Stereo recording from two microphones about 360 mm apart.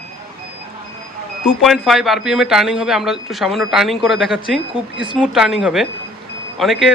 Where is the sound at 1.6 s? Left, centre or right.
Centre.